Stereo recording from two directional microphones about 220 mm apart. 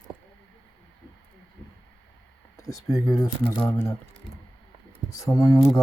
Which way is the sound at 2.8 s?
15° left (ahead or behind).